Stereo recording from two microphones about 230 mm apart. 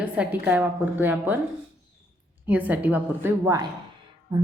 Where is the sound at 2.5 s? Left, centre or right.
Centre.